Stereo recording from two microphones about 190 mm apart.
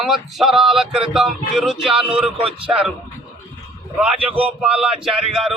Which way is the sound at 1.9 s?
30° right (ahead or behind).